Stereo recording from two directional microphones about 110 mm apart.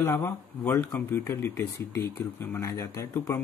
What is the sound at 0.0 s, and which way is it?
Speech, 20° left (ahead or behind).